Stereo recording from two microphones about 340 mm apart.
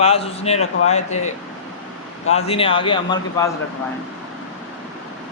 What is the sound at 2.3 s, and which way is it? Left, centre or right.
A man's voice, centre.